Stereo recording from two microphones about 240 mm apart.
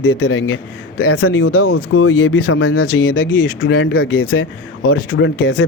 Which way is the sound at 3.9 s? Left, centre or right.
Left.